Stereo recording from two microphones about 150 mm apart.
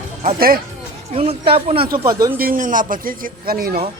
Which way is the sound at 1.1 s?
40° right (ahead or behind).